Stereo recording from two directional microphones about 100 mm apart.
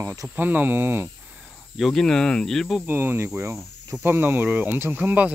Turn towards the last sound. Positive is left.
turn(degrees=-20)  # may be behind; listen again after turning